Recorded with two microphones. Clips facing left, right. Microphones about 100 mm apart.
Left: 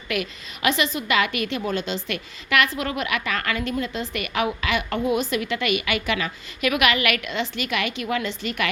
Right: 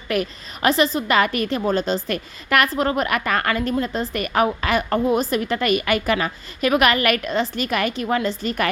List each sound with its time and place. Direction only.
0.1 s a woman's voice: 40° right (ahead or behind)